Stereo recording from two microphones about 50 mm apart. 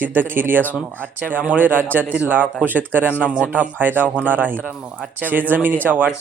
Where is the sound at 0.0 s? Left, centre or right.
Right.